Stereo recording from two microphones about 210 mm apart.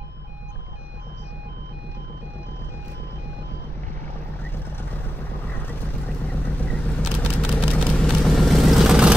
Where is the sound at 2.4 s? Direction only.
10° left (ahead or behind).